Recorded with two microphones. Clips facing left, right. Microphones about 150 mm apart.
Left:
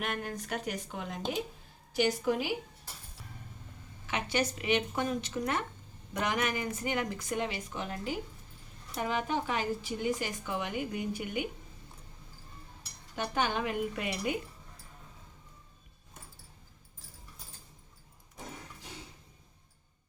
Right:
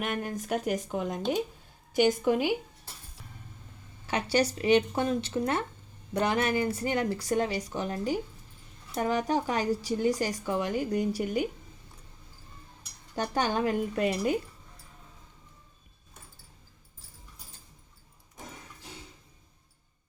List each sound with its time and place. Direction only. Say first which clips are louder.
0.0 s speech: right 4 dB; 45° right (ahead or behind)
2.0 s speech: right 5 dB; 55° right (ahead or behind)
4.0 s speech: right 5 dB; 35° right (ahead or behind)
13.1 s speech: right 4 dB; 35° right (ahead or behind)